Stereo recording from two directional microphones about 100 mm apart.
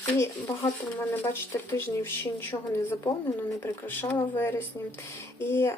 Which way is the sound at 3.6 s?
20° left (ahead or behind).